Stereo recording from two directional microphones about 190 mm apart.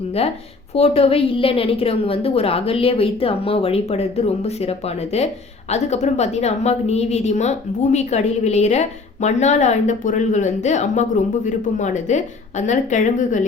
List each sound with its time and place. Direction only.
0.7 s a woman's voice: 30° left (ahead or behind)